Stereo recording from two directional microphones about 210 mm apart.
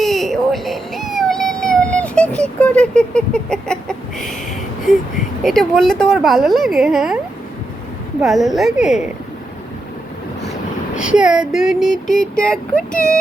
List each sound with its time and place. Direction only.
0.0 s a sound: centre (ahead or behind)
5.4 s speech: centre (ahead or behind)
8.2 s speech: centre (ahead or behind)
10.9 s speech: 5° right (ahead or behind)